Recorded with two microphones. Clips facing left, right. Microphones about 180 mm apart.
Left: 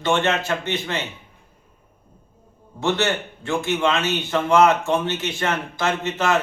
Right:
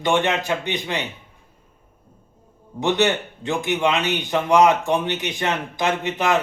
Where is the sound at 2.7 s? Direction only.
15° right (ahead or behind).